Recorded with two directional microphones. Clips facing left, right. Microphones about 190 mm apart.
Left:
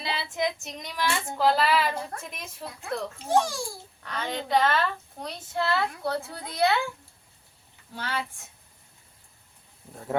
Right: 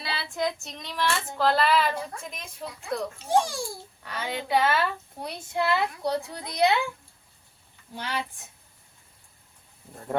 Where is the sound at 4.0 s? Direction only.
5° right (ahead or behind).